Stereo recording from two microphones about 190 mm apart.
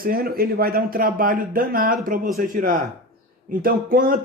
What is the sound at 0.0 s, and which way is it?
A man's voice, 50° right (ahead or behind).